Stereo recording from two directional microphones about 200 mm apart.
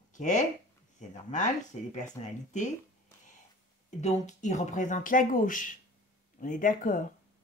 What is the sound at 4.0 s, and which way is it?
A woman's voice, 35° left (ahead or behind).